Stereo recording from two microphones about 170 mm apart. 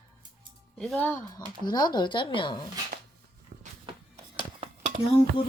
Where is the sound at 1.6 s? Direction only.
25° left (ahead or behind).